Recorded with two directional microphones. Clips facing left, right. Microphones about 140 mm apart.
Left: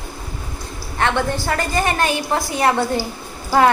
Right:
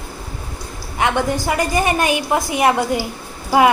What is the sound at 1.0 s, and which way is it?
A woman's voice, 15° right (ahead or behind).